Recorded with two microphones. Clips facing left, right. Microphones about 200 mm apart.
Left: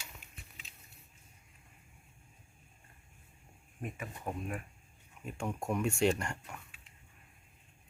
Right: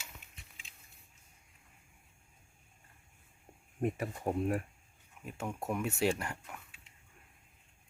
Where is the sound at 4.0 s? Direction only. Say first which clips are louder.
Right 7 dB; 35° right (ahead or behind).